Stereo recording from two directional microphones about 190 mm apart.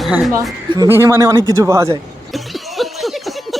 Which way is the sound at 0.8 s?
15° right (ahead or behind).